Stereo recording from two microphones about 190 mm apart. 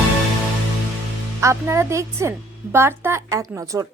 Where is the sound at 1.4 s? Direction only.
15° right (ahead or behind).